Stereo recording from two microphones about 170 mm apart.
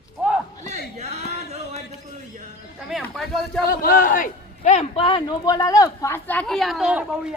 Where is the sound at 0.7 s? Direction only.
40° right (ahead or behind).